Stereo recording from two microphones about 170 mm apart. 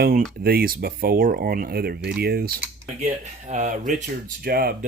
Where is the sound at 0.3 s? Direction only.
65° right (ahead or behind).